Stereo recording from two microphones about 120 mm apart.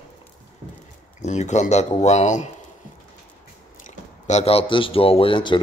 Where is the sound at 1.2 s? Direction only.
75° left (ahead or behind).